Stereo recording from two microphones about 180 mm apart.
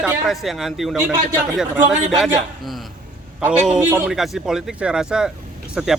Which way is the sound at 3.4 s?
5° right (ahead or behind).